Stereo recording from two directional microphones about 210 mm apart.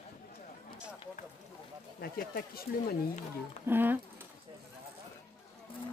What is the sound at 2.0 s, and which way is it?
Speech, 45° left (ahead or behind).